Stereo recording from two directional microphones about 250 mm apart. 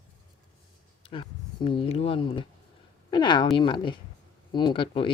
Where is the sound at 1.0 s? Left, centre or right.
Left.